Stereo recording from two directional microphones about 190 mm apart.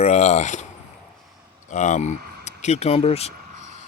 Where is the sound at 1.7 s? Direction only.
40° left (ahead or behind).